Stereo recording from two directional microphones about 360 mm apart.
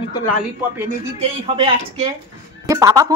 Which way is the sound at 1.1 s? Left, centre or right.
Centre.